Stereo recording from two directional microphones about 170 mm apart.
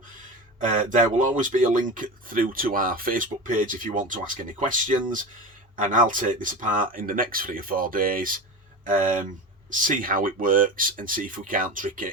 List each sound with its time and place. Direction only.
0.8 s speech: 50° right (ahead or behind)
9.6 s speech: 50° right (ahead or behind)